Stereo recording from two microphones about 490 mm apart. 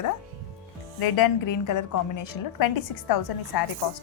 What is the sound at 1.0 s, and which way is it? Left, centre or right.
A woman's voice, left.